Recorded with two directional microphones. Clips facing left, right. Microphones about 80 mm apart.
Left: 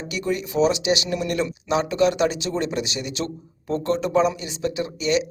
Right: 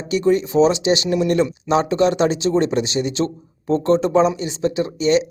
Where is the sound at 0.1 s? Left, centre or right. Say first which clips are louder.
Right 9 dB; right.